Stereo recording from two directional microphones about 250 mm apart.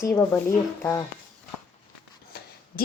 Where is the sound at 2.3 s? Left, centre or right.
Left.